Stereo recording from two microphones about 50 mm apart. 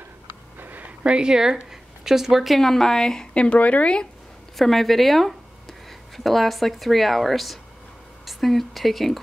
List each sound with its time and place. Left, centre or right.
0.6 s a sound: right
1.0 s speech: centre; by 4.1 s left
4.6 s speech: centre